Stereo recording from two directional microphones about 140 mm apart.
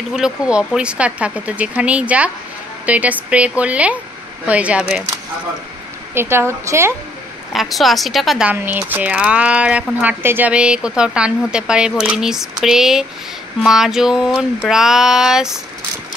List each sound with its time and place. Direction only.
0.1 s speech: 5° right (ahead or behind)
6.1 s a woman's voice: 20° right (ahead or behind)
7.5 s speech: centre (ahead or behind)
8.5 s speech: 10° right (ahead or behind)